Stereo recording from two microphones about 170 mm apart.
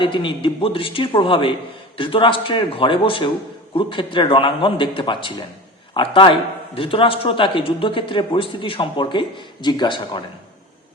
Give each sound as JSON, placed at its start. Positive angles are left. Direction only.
{"t": 0.0, "sound": "a man's voice", "side_deg": 30}